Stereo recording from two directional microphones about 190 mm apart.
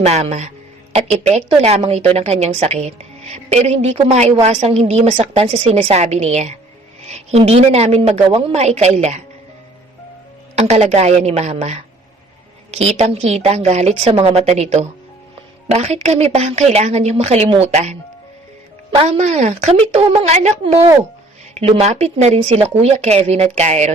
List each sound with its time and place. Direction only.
0.0 s a woman's voice: 35° right (ahead or behind)
10.5 s a woman's voice: 35° right (ahead or behind)